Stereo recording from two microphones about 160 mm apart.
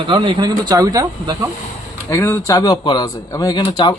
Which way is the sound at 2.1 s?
20° left (ahead or behind).